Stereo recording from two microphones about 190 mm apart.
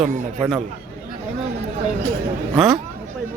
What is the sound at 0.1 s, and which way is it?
Speech, 40° right (ahead or behind).